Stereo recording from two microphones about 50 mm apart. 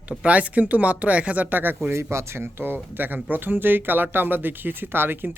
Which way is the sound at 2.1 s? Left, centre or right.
Right.